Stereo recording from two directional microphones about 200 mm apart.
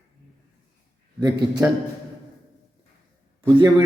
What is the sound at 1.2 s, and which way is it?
Speech, 20° right (ahead or behind).